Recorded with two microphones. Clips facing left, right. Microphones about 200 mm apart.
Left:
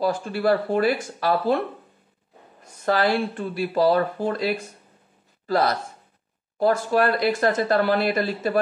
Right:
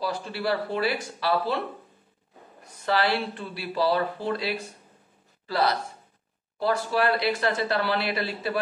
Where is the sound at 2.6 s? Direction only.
45° left (ahead or behind).